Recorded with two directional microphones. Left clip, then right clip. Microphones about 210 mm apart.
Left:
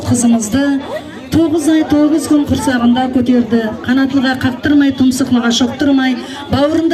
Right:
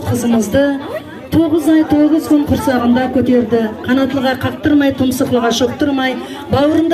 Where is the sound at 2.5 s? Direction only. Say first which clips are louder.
Even; 45° left (ahead or behind).